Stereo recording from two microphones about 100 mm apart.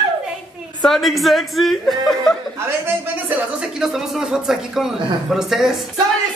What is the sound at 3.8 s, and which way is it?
Speech, 5° right (ahead or behind).